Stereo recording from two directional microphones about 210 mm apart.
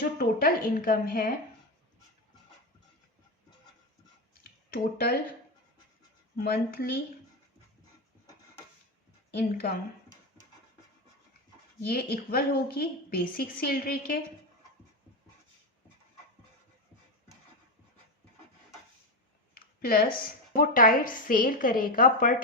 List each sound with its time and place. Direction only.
0.0 s a woman's voice: 45° left (ahead or behind)
4.7 s a woman's voice: 45° left (ahead or behind)
6.3 s a woman's voice: 45° left (ahead or behind)
11.8 s a woman's voice: 50° left (ahead or behind)
19.5 s a woman's voice: 45° left (ahead or behind)